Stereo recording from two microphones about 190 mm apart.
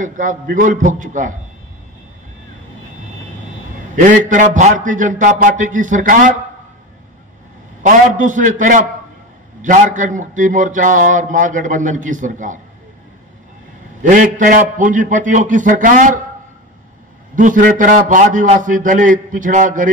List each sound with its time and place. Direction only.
0.0 s a man's voice: 45° right (ahead or behind)
3.9 s a man's voice: 45° right (ahead or behind)
7.8 s a man's voice: 40° right (ahead or behind)
14.0 s a man's voice: 45° right (ahead or behind)
17.4 s a man's voice: 45° right (ahead or behind)